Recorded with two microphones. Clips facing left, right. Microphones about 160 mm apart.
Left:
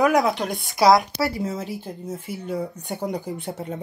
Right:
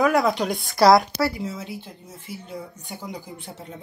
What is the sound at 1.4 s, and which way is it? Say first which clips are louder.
Speech: left 4 dB; 40° left (ahead or behind).